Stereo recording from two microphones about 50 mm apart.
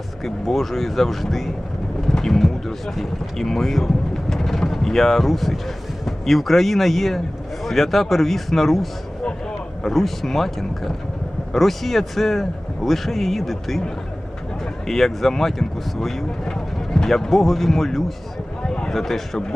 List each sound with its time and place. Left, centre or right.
0.2 s speech: centre
18.6 s a sound: centre
18.9 s speech: centre